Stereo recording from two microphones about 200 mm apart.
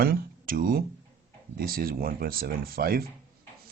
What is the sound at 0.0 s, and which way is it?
Speech, 50° right (ahead or behind).